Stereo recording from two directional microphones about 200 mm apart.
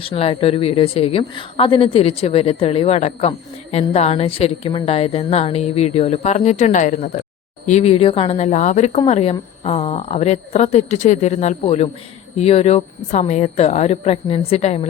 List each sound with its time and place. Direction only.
0.0 s a woman's voice: 25° left (ahead or behind)